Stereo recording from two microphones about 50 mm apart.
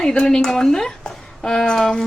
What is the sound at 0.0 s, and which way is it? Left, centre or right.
A woman's voice, centre.